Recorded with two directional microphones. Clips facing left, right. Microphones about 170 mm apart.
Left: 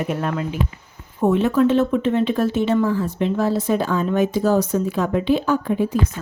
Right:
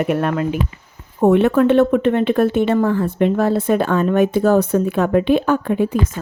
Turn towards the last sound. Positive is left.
turn(degrees=-60)  # may be behind; listen again after turning